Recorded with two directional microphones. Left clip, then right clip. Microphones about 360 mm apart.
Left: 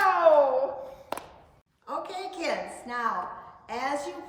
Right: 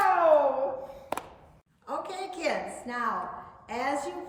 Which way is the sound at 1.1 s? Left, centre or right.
Centre.